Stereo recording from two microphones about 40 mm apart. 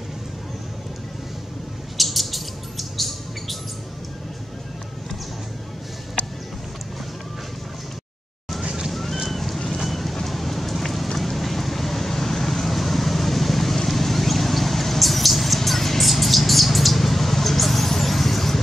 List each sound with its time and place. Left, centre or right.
2.0 s bird: centre
8.6 s vehicle: centre
8.9 s boat: centre
9.8 s vehicle: centre
13.8 s mouse: centre